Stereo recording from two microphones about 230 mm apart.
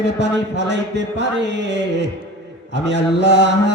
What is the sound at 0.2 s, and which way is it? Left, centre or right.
Mantra, right.